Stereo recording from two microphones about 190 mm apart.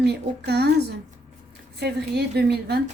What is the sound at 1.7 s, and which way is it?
Music, 60° right (ahead or behind).